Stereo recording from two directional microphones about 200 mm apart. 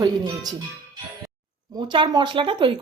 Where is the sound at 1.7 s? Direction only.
25° right (ahead or behind).